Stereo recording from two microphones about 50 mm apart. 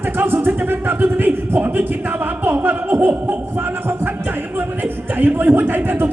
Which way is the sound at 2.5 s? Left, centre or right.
Right.